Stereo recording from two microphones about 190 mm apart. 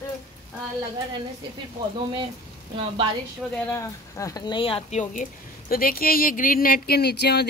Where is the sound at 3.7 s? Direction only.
15° left (ahead or behind).